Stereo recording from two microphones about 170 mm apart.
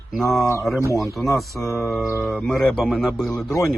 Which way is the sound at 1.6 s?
15° left (ahead or behind).